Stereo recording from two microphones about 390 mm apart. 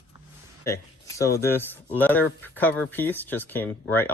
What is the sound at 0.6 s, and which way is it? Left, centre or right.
Speech, centre.